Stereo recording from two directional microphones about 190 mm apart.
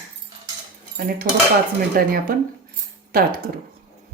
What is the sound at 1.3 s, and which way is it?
Speech, 45° right (ahead or behind).